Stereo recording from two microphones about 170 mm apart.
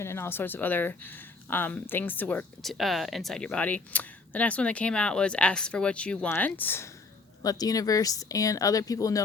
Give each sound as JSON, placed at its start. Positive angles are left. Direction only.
{"t": 0.0, "sound": "speech", "side_deg": 15}